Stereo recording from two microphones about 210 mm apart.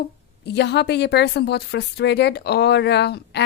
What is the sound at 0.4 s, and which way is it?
Speech, 50° left (ahead or behind).